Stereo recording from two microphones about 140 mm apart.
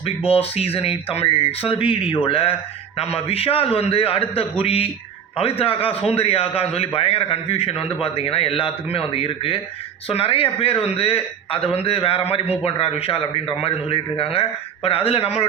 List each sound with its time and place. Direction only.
0.3 s a man's voice: 45° left (ahead or behind)